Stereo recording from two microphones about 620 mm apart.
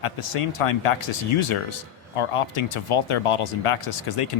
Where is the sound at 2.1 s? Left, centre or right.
Left.